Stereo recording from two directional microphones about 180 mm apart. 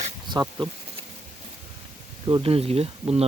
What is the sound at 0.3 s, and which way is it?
Speech, 20° right (ahead or behind).